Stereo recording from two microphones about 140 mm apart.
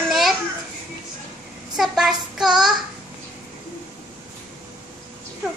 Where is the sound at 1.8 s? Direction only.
5° right (ahead or behind).